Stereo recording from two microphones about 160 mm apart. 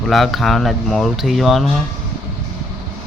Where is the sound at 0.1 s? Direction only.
Centre (ahead or behind).